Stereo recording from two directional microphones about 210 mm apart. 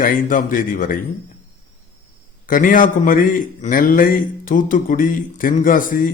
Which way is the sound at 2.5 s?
40° left (ahead or behind).